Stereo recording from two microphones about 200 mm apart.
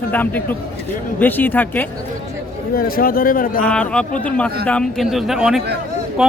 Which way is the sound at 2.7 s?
50° left (ahead or behind).